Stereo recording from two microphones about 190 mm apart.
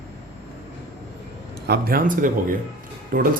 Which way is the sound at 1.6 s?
55° right (ahead or behind).